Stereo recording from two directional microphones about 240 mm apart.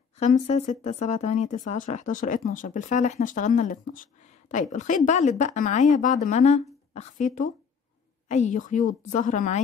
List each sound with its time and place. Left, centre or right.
0.2 s speech: left